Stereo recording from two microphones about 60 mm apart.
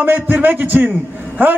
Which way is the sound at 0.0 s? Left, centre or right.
Right.